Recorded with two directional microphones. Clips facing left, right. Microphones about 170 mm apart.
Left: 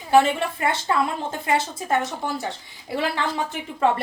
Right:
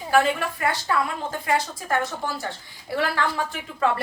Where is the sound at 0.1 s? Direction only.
25° left (ahead or behind).